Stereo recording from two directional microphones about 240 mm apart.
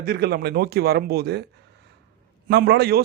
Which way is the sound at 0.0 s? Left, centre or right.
Right.